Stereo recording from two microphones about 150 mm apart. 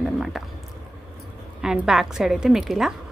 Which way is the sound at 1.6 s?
5° right (ahead or behind).